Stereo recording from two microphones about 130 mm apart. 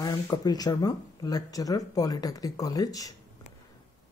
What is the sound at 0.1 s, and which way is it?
Speech, 35° left (ahead or behind).